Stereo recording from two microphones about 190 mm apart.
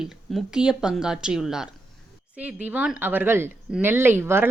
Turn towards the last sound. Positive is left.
turn(degrees=-10)  # may be behind; listen again after turning